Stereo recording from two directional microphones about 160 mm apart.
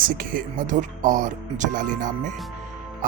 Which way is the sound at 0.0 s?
60° right (ahead or behind).